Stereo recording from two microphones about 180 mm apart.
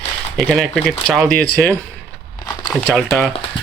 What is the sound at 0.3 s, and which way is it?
Speech, 5° left (ahead or behind).